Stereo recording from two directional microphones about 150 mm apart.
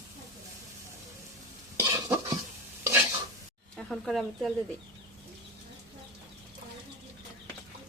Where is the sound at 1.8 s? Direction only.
15° right (ahead or behind).